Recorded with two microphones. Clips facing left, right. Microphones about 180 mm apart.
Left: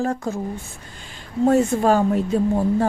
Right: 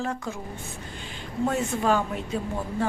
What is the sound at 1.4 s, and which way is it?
Speech, 40° left (ahead or behind).